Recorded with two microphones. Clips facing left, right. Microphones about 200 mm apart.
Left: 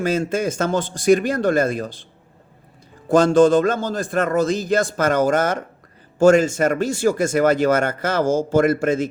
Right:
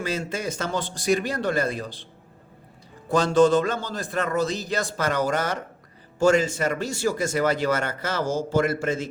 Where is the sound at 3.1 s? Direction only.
50° left (ahead or behind).